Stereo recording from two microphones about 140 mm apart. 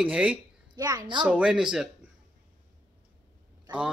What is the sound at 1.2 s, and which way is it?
Speech, 5° right (ahead or behind).